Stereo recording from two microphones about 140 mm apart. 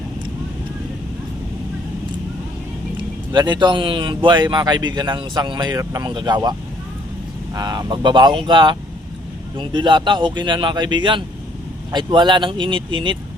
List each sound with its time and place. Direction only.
3.3 s a man's voice: 30° right (ahead or behind)